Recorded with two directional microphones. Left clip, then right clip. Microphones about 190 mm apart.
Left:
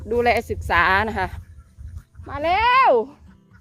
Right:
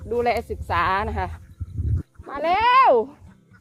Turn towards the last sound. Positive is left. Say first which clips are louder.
# even
turn(degrees=0)  # may be behind; listen again after turning